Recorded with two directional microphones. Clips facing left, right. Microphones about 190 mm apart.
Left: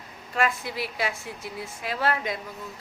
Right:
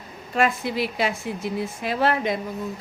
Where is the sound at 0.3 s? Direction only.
20° right (ahead or behind).